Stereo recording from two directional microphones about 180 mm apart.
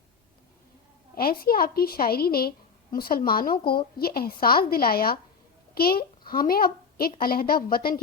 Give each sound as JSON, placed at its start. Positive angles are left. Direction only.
{"t": 1.1, "sound": "a child's voice", "side_deg": 55}